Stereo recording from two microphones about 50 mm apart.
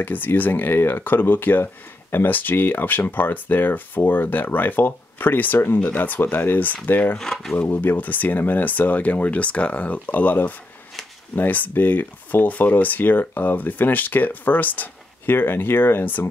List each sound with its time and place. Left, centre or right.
0.0 s speech: left
7.2 s speech: centre
7.5 s speech: left